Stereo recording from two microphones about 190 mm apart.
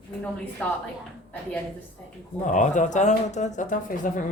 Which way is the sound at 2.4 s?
40° left (ahead or behind).